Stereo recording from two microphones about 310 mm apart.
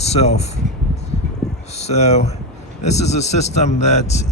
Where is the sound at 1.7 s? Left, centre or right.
Left.